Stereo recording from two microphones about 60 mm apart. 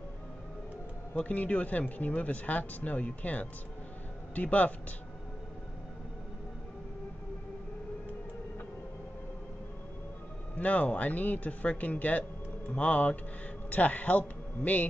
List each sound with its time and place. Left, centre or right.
1.1 s a man's voice: left
10.5 s a man's voice: left